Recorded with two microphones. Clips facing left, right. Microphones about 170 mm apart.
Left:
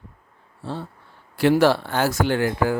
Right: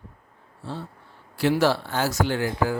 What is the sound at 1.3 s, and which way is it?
A man's voice, 55° left (ahead or behind).